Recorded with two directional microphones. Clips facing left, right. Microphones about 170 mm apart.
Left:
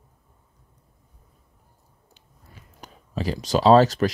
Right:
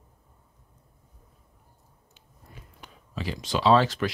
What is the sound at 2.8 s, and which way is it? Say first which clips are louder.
Speech: left 6 dB; 40° left (ahead or behind).